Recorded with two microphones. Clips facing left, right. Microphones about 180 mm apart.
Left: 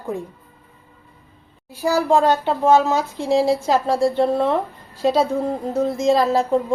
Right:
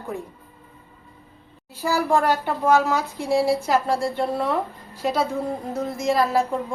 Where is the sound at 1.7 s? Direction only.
15° left (ahead or behind).